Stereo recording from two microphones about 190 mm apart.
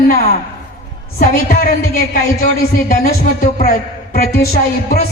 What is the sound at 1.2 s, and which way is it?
Speech, 50° left (ahead or behind).